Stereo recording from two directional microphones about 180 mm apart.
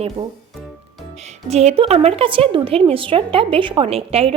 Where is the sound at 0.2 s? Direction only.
30° right (ahead or behind).